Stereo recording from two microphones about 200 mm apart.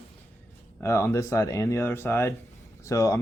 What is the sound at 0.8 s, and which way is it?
Speech, 15° left (ahead or behind).